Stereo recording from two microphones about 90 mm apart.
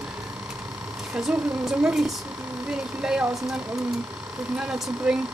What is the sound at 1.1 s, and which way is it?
Speech, 10° right (ahead or behind).